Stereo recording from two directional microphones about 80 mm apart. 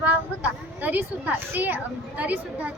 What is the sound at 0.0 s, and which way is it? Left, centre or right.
A woman's voice, centre.